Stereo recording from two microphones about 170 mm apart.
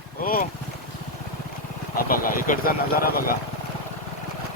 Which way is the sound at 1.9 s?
55° left (ahead or behind).